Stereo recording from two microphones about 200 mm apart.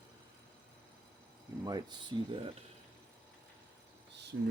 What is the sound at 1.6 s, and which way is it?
Speech, 20° right (ahead or behind).